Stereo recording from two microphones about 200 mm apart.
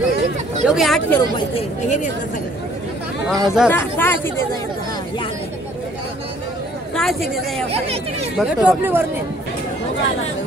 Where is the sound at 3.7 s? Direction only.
10° left (ahead or behind).